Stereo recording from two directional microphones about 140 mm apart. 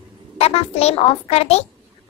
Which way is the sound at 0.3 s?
45° left (ahead or behind).